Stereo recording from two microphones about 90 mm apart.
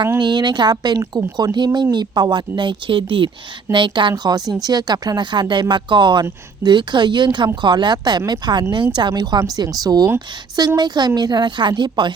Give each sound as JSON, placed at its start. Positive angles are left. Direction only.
{"t": 0.2, "sound": "speech", "side_deg": -55}
{"t": 4.2, "sound": "a woman's voice", "side_deg": -50}